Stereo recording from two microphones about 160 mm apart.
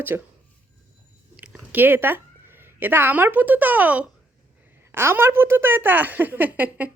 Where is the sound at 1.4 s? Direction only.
10° right (ahead or behind).